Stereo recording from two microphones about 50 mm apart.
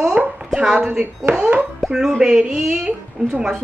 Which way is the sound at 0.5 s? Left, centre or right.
Centre.